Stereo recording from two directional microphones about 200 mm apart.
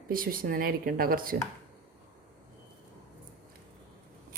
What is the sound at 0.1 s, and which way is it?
Speech, 45° right (ahead or behind).